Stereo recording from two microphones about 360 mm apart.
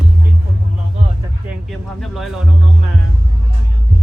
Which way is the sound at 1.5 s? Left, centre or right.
Centre.